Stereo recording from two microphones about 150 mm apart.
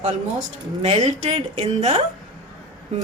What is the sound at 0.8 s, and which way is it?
A woman's voice, 45° right (ahead or behind).